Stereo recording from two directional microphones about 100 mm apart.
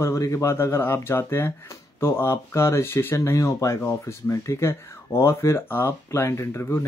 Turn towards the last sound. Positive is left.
turn(degrees=25)  # may be behind; listen again after turning